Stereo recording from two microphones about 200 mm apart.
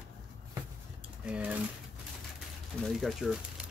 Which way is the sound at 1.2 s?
5° right (ahead or behind).